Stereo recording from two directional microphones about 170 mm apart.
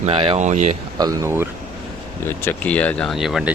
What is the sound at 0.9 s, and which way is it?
Speech, 20° right (ahead or behind).